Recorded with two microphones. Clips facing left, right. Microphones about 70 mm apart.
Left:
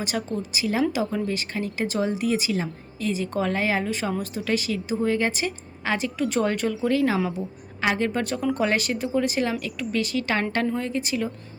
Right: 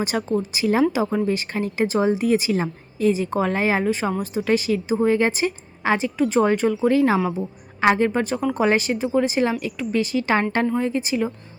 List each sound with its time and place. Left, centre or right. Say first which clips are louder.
0.0 s speech: right 5 dB; right